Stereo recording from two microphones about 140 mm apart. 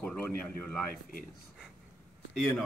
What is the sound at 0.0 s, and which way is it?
Speech, 10° left (ahead or behind).